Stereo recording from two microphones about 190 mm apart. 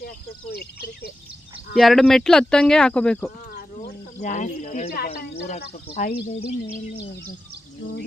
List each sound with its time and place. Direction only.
0.5 s speech: 55° left (ahead or behind)
1.7 s speech: centre (ahead or behind)
3.8 s cricket: 40° left (ahead or behind)
4.9 s speech: 55° left (ahead or behind)
5.5 s speech: 35° left (ahead or behind)